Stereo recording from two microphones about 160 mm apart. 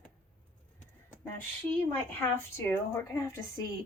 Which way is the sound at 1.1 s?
10° left (ahead or behind).